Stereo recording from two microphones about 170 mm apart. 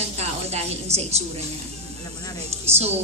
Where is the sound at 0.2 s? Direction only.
40° right (ahead or behind).